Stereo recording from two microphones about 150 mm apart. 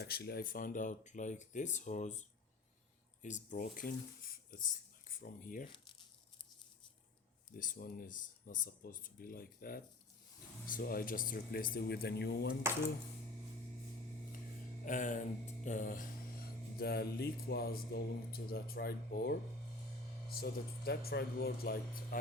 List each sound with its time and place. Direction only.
0.0 s speech: 90° left; by 5.6 s 65° left (ahead or behind)
7.5 s speech: 70° left (ahead or behind); by 12.5 s 90° left
14.8 s speech: 55° left (ahead or behind)
16.7 s speech: 90° left